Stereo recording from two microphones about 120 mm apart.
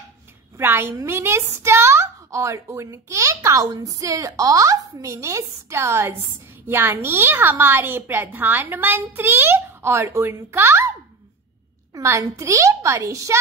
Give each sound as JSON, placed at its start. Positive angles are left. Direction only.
{"t": 0.6, "sound": "a woman's voice", "side_deg": -20}
{"t": 11.9, "sound": "a woman's voice", "side_deg": -25}